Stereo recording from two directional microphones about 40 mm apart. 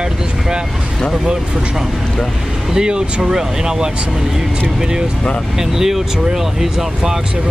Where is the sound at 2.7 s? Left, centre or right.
Right.